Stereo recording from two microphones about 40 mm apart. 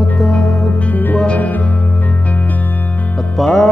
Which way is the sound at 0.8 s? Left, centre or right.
Left.